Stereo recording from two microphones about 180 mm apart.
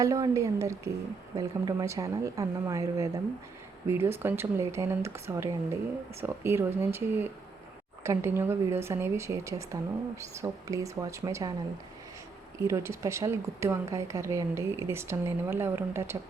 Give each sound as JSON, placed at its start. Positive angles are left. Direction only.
{"t": 0.0, "sound": "speech", "side_deg": -20}
{"t": 12.5, "sound": "speech", "side_deg": -15}